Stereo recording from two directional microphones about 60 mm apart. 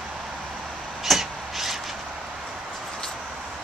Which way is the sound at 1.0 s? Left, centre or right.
Centre.